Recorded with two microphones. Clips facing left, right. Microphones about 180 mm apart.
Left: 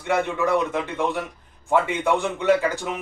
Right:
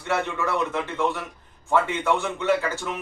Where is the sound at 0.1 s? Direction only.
15° left (ahead or behind).